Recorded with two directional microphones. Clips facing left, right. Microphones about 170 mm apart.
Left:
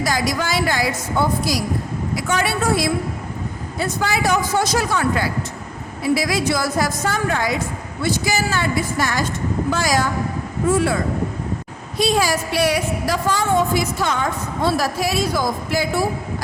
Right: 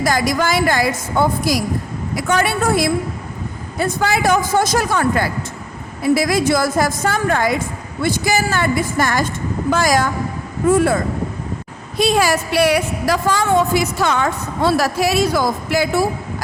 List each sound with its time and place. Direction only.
0.0 s a woman's voice: 50° right (ahead or behind)
11.9 s a woman's voice: 60° right (ahead or behind)